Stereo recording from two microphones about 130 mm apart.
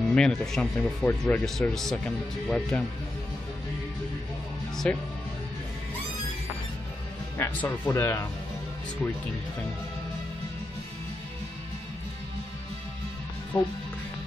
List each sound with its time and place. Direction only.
0.0 s speech: 5° left (ahead or behind)
4.9 s speech: 10° left (ahead or behind)
7.3 s speech: 20° left (ahead or behind)
13.5 s speech: 10° left (ahead or behind)